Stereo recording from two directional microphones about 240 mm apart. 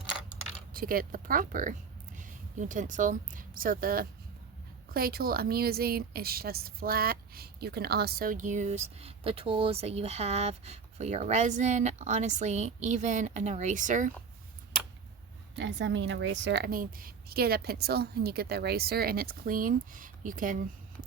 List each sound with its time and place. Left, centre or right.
0.7 s a woman's voice: right
15.5 s a woman's voice: right